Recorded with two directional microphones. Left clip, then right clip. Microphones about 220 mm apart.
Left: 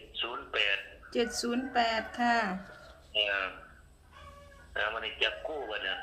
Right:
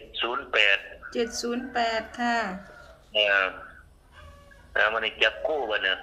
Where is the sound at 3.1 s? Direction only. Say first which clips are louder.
Right 8 dB; 45° right (ahead or behind).